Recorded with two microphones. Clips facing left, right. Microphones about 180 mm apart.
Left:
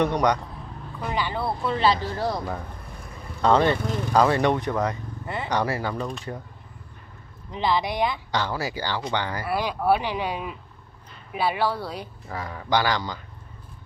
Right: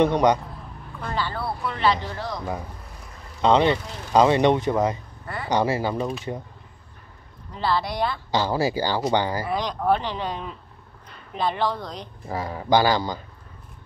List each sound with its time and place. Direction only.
0.0 s speech: 25° right (ahead or behind)
0.9 s speech: 15° left (ahead or behind); by 2.0 s 30° left (ahead or behind)
2.1 s speech: 40° left (ahead or behind)
3.4 s speech: 15° right (ahead or behind)
5.2 s a sound: 20° left (ahead or behind)
5.5 s speech: 25° right (ahead or behind)
5.9 s speech: 5° right (ahead or behind)
7.5 s speech: 15° left (ahead or behind)
8.3 s speech: 30° right (ahead or behind)
9.5 s speech: 5° left (ahead or behind)
12.3 s speech: 30° right (ahead or behind)